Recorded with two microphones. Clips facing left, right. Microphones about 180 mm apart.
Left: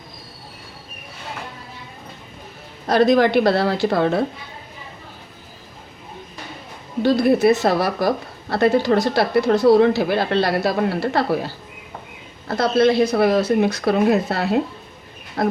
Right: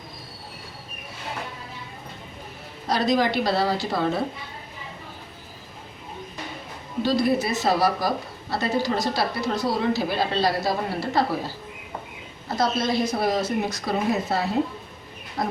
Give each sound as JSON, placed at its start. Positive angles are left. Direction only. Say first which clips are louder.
{"t": 2.8, "sound": "speech", "louder": "left 7 dB", "side_deg": 55}
{"t": 7.0, "sound": "speech", "louder": "left 7 dB", "side_deg": 55}
{"t": 12.5, "sound": "speech", "louder": "left 8 dB", "side_deg": 65}